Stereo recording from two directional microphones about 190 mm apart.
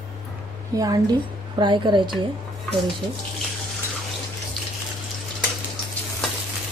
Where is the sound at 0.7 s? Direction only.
20° right (ahead or behind).